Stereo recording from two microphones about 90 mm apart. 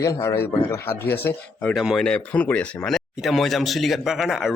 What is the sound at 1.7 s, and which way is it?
Speech, 5° right (ahead or behind).